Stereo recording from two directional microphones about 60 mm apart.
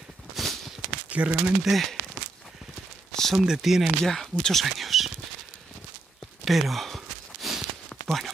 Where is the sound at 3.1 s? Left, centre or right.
Centre.